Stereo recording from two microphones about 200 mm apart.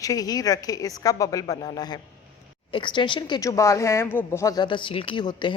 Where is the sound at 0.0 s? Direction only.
15° left (ahead or behind).